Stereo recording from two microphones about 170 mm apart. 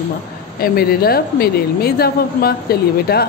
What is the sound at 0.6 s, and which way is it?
A woman's voice, 65° left (ahead or behind).